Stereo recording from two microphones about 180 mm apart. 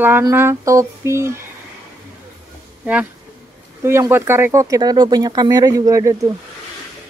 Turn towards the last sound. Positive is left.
turn(degrees=-20)  # may be behind; listen again after turning